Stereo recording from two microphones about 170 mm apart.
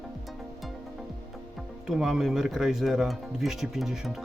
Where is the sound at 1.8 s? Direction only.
Centre (ahead or behind).